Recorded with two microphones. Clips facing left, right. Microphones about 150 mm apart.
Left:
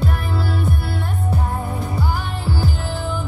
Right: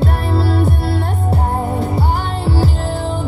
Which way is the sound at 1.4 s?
45° right (ahead or behind).